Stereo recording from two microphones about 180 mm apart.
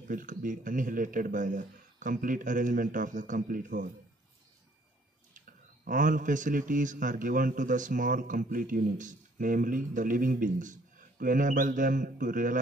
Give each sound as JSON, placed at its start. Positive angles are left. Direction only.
{"t": 0.1, "sound": "a man's voice", "side_deg": -50}
{"t": 5.9, "sound": "a man's voice", "side_deg": -45}